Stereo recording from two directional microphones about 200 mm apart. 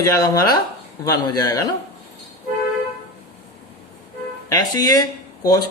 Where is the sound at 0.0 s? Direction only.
15° left (ahead or behind).